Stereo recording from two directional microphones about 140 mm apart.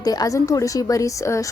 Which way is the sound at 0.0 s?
25° left (ahead or behind).